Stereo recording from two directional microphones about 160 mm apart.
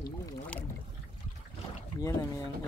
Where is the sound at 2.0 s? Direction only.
20° left (ahead or behind).